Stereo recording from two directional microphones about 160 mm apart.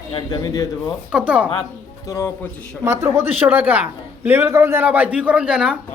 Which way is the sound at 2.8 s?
15° right (ahead or behind).